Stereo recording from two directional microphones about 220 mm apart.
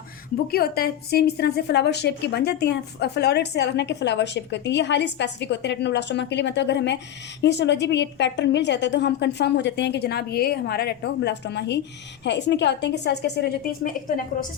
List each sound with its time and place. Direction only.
0.4 s a woman's voice: 45° left (ahead or behind)